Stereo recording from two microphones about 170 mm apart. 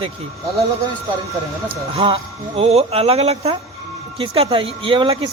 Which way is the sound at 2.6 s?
35° right (ahead or behind).